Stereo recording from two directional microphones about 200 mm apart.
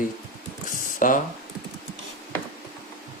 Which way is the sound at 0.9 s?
40° left (ahead or behind).